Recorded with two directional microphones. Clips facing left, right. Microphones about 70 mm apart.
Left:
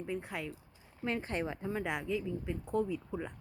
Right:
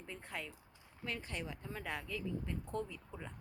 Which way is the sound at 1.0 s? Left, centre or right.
Left.